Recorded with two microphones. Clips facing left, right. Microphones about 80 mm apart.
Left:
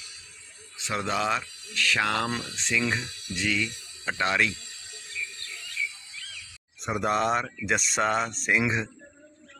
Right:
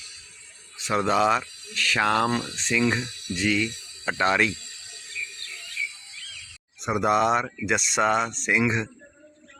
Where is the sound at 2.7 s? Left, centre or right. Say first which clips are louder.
Right 4 dB; centre.